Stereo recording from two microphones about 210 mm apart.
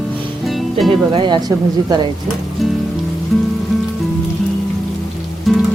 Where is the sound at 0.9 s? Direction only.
25° right (ahead or behind).